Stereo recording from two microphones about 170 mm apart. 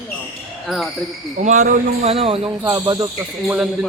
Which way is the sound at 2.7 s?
25° right (ahead or behind).